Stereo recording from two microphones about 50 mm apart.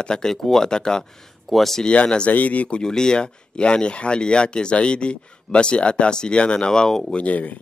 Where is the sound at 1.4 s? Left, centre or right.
Centre.